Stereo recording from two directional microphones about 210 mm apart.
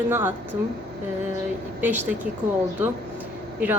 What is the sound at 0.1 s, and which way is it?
Speech, 10° right (ahead or behind).